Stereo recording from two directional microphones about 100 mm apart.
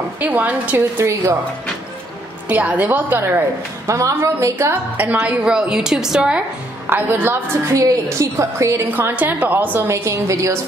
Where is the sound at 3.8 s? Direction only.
30° right (ahead or behind).